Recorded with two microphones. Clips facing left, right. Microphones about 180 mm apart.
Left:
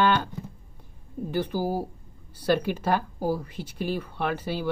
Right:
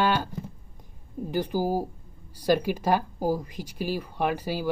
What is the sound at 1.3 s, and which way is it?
Speech, 15° right (ahead or behind).